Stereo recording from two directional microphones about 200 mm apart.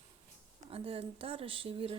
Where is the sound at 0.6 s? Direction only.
30° right (ahead or behind).